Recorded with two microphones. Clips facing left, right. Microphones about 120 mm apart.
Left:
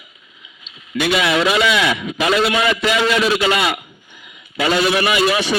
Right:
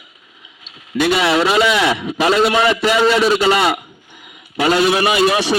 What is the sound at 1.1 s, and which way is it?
A man's voice, 35° right (ahead or behind).